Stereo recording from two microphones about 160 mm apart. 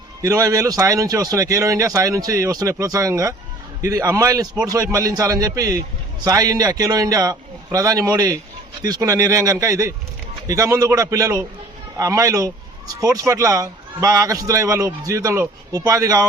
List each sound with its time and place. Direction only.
0.2 s a man's voice: 20° right (ahead or behind)